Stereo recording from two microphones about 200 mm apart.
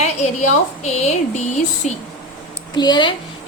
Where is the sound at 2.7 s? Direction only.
20° left (ahead or behind).